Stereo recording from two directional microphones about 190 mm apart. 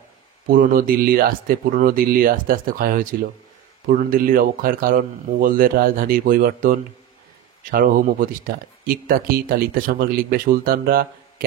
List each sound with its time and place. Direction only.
0.5 s speech: 50° right (ahead or behind)